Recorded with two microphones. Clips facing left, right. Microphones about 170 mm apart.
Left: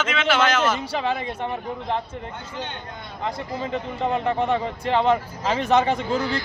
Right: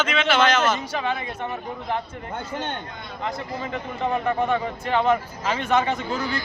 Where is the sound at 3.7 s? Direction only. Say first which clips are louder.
Left 1 dB; 30° left (ahead or behind).